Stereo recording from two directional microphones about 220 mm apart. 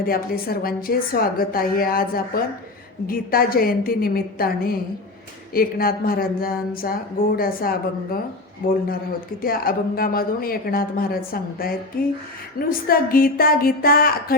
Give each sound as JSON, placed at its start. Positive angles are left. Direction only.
{"t": 0.0, "sound": "a woman's voice", "side_deg": 40}